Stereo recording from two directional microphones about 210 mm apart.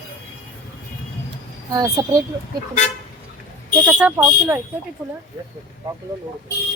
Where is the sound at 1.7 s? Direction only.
15° right (ahead or behind).